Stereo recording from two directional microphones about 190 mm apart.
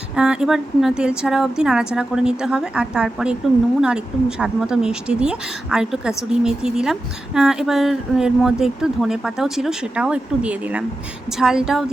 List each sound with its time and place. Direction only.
0.2 s speech: 5° right (ahead or behind)